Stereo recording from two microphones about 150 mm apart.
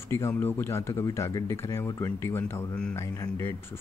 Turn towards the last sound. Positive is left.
turn(degrees=15)  # may be behind; listen again after turning